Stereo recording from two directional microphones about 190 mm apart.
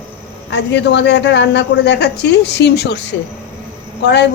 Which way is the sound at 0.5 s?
65° left (ahead or behind).